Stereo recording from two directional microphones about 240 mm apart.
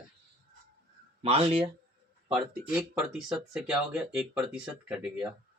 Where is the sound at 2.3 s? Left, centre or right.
Centre.